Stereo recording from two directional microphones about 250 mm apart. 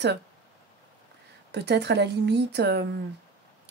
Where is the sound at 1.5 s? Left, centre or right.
Right.